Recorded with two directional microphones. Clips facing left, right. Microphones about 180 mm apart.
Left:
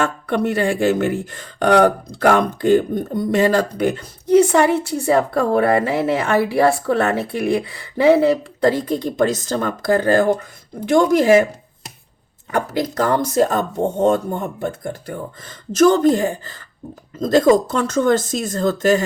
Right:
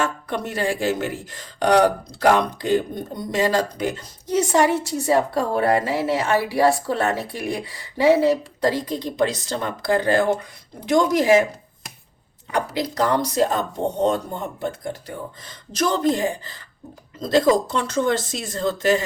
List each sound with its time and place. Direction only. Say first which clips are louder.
0.0 s speech: left 6 dB; 60° left (ahead or behind); by 10.2 s 40° left (ahead or behind)
10.8 s speech: left 4 dB; 55° left (ahead or behind)
12.5 s speech: left 3 dB; 50° left (ahead or behind)